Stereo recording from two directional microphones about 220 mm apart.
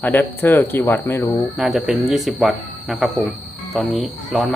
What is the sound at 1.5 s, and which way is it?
Speech, centre (ahead or behind).